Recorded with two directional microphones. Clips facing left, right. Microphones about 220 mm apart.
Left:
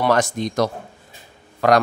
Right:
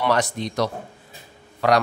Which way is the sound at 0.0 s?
45° left (ahead or behind).